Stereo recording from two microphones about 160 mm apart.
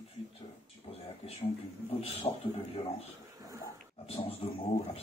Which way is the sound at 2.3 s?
35° left (ahead or behind).